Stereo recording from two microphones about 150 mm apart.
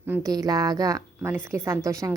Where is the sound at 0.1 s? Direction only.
25° right (ahead or behind).